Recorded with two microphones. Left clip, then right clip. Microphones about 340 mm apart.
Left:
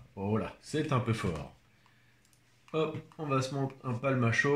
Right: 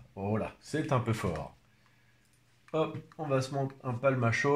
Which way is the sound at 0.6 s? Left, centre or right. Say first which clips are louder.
Right 1 dB; centre.